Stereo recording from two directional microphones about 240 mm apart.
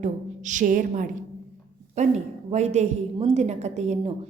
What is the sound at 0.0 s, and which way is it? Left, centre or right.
A woman's voice, right.